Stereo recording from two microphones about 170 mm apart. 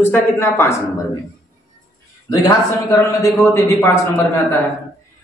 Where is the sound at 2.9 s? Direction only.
20° left (ahead or behind).